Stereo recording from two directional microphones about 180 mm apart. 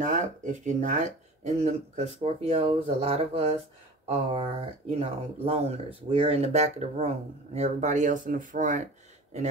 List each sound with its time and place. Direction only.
0.0 s speech: 45° right (ahead or behind)